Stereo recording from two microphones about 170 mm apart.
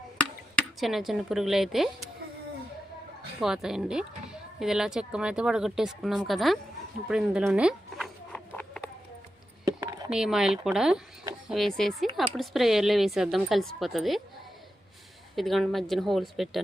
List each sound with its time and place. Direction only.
0.8 s a woman's voice: centre (ahead or behind)
3.4 s a woman's voice: 5° right (ahead or behind)
7.1 s a sound: 5° right (ahead or behind)
9.6 s a sound: 20° right (ahead or behind)
10.1 s a woman's voice: 5° right (ahead or behind)
15.4 s a woman's voice: centre (ahead or behind)